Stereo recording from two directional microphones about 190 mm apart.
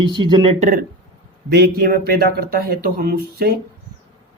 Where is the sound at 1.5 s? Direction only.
55° right (ahead or behind).